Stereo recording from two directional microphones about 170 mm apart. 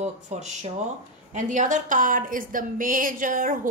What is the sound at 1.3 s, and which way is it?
A woman's voice, 45° right (ahead or behind).